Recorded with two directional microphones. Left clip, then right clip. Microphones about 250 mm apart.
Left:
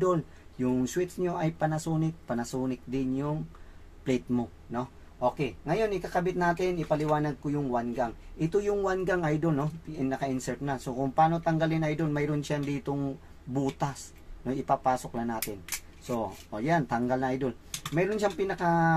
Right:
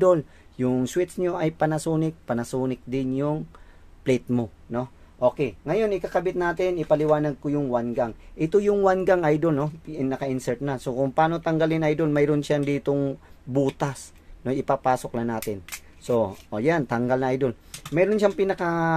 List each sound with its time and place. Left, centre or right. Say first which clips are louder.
0.0 s speech: right 8 dB; right